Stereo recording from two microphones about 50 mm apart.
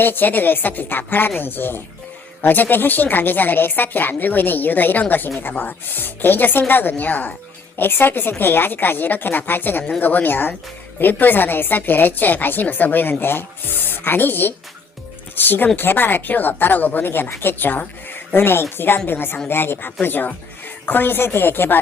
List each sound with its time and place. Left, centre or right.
0.0 s a woman's voice: left